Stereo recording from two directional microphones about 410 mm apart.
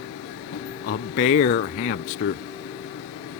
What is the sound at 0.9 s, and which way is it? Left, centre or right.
Speech, centre.